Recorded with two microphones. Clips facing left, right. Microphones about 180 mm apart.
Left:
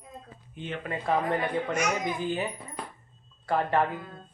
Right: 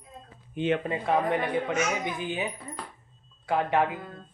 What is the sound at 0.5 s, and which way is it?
Speech, 70° right (ahead or behind).